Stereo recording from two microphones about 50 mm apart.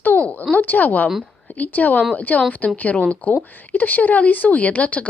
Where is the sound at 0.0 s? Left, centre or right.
Left.